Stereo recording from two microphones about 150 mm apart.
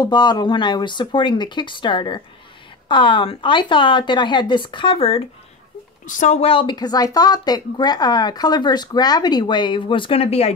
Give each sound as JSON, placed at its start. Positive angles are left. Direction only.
{"t": 0.0, "sound": "speech", "side_deg": 30}
{"t": 6.0, "sound": "speech", "side_deg": 55}